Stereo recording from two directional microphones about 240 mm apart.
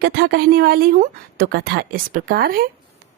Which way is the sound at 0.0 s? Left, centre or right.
Right.